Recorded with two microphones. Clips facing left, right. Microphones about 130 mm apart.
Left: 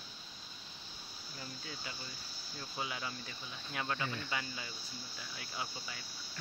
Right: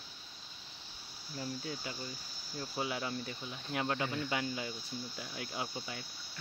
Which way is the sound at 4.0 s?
15° right (ahead or behind).